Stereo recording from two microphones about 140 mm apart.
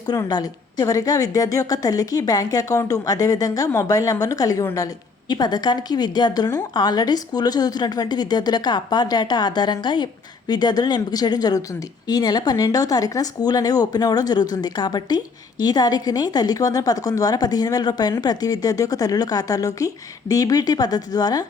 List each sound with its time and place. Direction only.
0.0 s speech: 30° left (ahead or behind)